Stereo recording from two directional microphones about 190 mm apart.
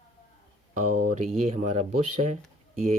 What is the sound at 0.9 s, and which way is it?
Speech, 45° right (ahead or behind).